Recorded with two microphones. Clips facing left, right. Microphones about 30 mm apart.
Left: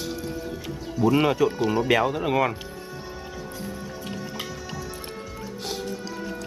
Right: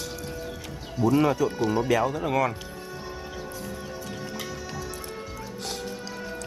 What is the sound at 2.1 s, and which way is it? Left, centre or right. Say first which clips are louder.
Speech: left 2 dB; left.